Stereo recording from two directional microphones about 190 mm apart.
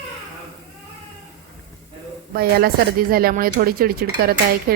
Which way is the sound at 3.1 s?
50° right (ahead or behind).